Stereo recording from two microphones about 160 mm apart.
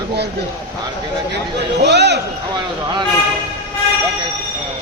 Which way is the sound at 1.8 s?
90° right.